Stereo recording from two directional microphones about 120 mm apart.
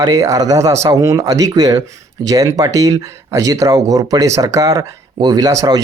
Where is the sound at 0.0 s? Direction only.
30° right (ahead or behind).